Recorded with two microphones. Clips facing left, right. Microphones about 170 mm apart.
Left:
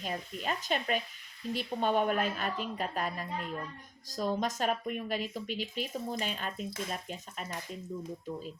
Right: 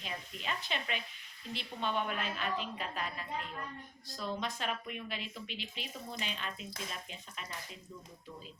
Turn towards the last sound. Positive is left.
turn(degrees=45)  # may be behind; listen again after turning